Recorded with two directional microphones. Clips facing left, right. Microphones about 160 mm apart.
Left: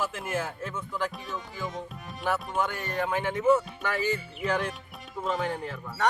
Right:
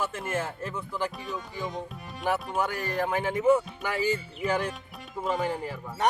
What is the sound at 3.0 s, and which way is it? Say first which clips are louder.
Speech: right 1 dB; 5° right (ahead or behind).